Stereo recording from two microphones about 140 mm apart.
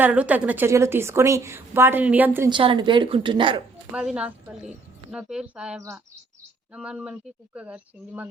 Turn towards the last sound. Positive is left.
turn(degrees=-5)  # may be behind; listen again after turning